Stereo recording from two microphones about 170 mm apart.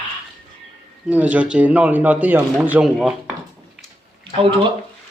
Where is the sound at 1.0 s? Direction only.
10° right (ahead or behind).